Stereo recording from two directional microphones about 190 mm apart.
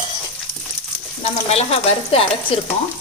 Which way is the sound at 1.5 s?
30° left (ahead or behind).